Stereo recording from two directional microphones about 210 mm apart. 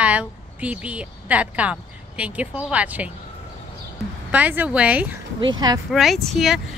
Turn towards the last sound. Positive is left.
turn(degrees=0)  # may be behind; listen again after turning